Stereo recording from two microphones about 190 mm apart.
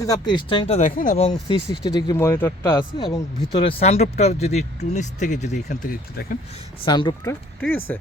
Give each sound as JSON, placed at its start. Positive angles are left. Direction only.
{"t": 0.0, "sound": "speech", "side_deg": 20}
{"t": 1.7, "sound": "speech", "side_deg": 25}
{"t": 6.8, "sound": "speech", "side_deg": 25}
{"t": 7.6, "sound": "speech", "side_deg": 10}